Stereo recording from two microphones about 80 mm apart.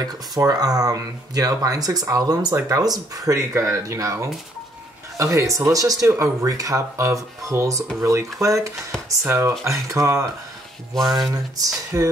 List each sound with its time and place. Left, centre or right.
0.4 s speech: right
3.3 s speech: right
11.3 s speech: right